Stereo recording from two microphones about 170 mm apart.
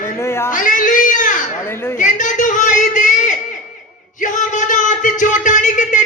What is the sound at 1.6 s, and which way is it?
Speech, 15° left (ahead or behind).